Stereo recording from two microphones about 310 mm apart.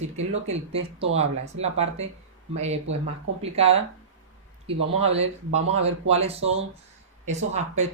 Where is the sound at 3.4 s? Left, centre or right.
Centre.